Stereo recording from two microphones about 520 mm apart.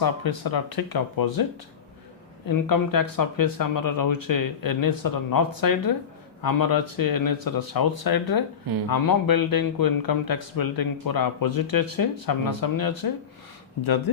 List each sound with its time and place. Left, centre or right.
0.0 s speech: left
2.5 s speech: left